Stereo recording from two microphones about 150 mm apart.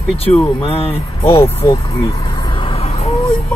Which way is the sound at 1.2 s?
20° left (ahead or behind).